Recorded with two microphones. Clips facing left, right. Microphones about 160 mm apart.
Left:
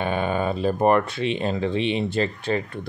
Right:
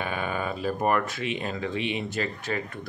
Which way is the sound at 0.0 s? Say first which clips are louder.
Left 6 dB; 30° left (ahead or behind).